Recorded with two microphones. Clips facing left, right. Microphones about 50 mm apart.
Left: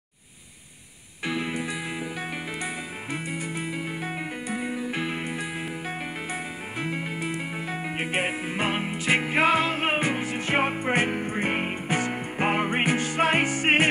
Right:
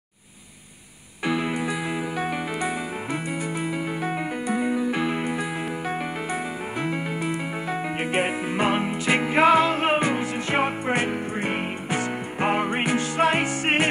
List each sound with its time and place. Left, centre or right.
1.2 s music: centre
2.6 s music: centre
6.8 s music: centre; by 13.8 s left